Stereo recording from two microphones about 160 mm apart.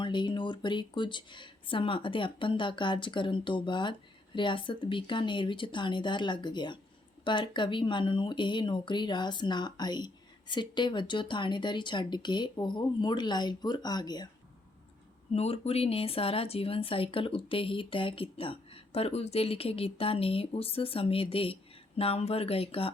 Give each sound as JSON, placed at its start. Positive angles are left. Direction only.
{"t": 0.0, "sound": "speech", "side_deg": 30}
{"t": 15.3, "sound": "speech", "side_deg": 40}